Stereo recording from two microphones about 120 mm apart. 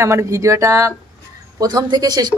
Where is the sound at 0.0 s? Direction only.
25° right (ahead or behind).